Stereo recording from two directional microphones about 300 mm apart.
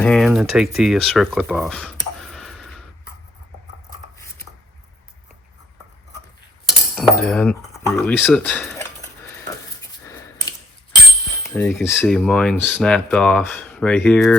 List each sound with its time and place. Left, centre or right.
0.0 s speech: centre
2.3 s a sound: centre
6.9 s speech: centre
11.5 s speech: centre